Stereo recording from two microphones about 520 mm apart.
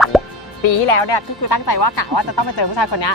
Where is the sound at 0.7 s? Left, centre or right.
Left.